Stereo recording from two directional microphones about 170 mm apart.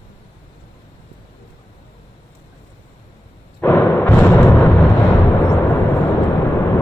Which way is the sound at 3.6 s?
10° left (ahead or behind).